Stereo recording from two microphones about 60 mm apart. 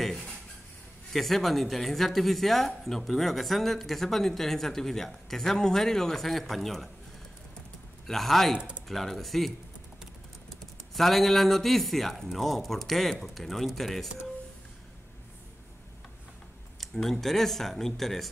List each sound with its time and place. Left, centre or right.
0.0 s dishes: centre
1.1 s speech: centre
8.1 s speech: centre
8.5 s speech: centre
8.8 s speech: centre
11.0 s speech: centre
16.8 s speech: centre